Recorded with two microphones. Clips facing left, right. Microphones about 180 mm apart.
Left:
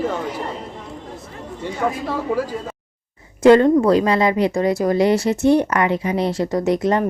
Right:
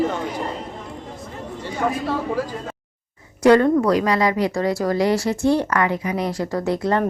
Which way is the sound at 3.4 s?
25° left (ahead or behind).